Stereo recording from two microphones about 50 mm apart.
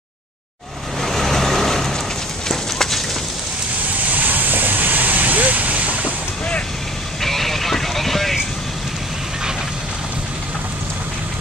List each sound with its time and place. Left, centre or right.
1.0 s vehicle: centre
2.4 s a sound: centre
4.1 s vehicle: right
7.2 s vehicle: centre